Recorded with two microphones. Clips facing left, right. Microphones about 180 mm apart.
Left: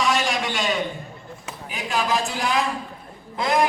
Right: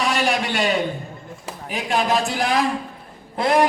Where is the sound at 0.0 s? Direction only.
60° right (ahead or behind).